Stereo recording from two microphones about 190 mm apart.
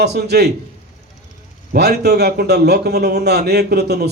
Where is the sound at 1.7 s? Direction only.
60° right (ahead or behind).